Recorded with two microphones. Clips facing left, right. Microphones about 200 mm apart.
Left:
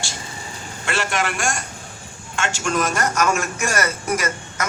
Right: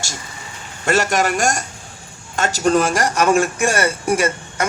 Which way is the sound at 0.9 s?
40° right (ahead or behind).